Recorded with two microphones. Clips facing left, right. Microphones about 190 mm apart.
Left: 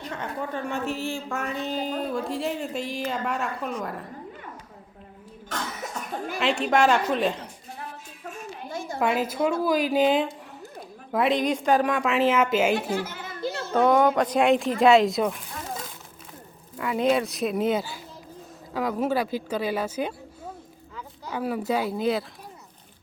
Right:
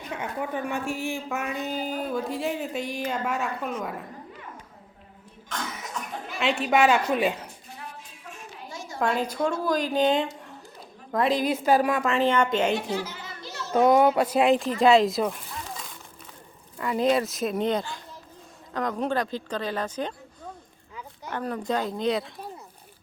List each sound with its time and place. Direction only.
0.1 s speech: 10° right (ahead or behind)
1.3 s speech: 5° right (ahead or behind)
6.4 s speech: centre (ahead or behind)
8.2 s a sound: 50° left (ahead or behind)
9.0 s speech: 5° left (ahead or behind)
12.9 s a sound: 50° left (ahead or behind)
13.7 s speech: 10° right (ahead or behind)
16.7 s speech: centre (ahead or behind)
21.2 s speech: 5° left (ahead or behind)